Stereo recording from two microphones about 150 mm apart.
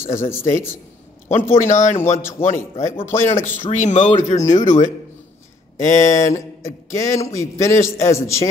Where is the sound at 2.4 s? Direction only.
55° left (ahead or behind).